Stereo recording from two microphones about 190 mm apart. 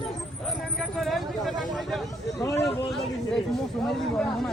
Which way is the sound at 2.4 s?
15° left (ahead or behind).